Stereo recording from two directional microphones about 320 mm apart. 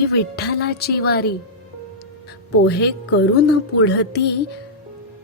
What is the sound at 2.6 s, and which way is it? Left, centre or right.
A woman's voice, left.